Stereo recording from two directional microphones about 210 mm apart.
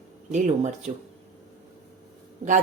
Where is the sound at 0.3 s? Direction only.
35° right (ahead or behind).